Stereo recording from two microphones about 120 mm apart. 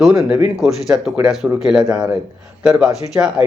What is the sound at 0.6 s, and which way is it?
A man's voice, 5° right (ahead or behind).